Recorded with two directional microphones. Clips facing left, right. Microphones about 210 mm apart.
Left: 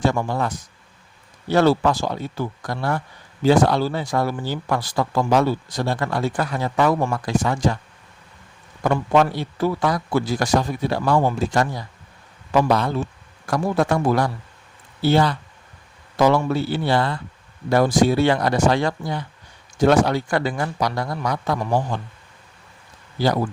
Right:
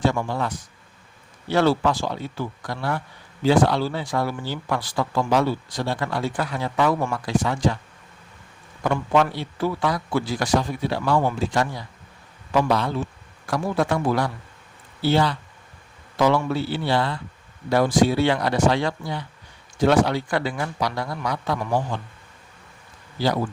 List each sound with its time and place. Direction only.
0.0 s speech: 45° left (ahead or behind)
8.8 s speech: 40° left (ahead or behind)